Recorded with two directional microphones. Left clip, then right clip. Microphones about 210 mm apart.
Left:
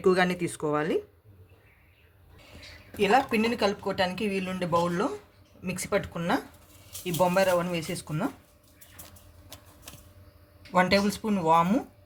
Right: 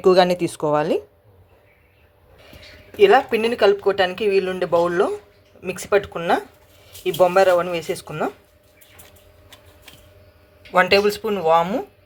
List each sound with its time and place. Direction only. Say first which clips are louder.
0.0 s speech: right 9 dB; 20° right (ahead or behind)
3.0 s speech: right 9 dB; 10° right (ahead or behind)
10.8 s speech: right 8 dB; 5° right (ahead or behind)